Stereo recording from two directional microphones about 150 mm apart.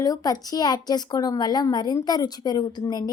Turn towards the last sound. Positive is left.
turn(degrees=30)  # may be behind; listen again after turning